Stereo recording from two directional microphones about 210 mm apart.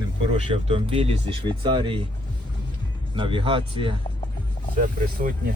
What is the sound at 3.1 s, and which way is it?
Speech, 25° right (ahead or behind).